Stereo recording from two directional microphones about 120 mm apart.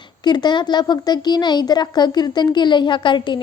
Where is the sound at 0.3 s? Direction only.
40° left (ahead or behind).